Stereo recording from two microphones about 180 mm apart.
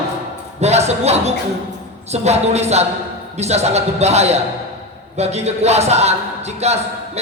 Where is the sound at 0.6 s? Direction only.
35° right (ahead or behind).